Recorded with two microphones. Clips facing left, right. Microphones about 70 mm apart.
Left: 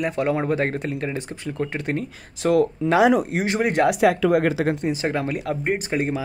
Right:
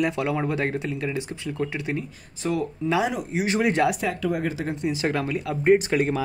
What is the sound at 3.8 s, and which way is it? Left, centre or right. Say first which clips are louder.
Speech: left 7 dB; left.